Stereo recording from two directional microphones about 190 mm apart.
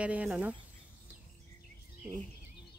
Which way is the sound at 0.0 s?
5° right (ahead or behind).